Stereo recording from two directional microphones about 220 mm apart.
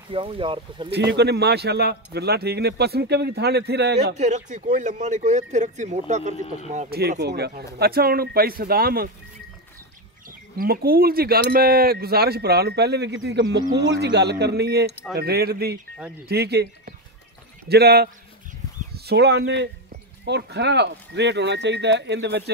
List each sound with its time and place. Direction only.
0.1 s speech: 25° right (ahead or behind)
0.9 s speech: 50° right (ahead or behind)
4.1 s speech: 35° right (ahead or behind)
7.0 s speech: 50° right (ahead or behind)
10.6 s speech: 45° right (ahead or behind)